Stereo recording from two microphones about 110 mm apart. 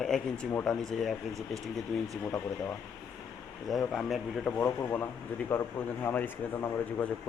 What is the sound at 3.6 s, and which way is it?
Speech, 5° left (ahead or behind).